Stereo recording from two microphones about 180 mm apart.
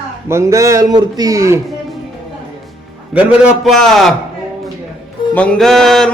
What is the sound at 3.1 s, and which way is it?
Speech, 5° right (ahead or behind).